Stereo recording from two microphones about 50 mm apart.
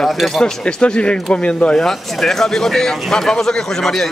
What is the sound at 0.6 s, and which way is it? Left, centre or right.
Speech, left.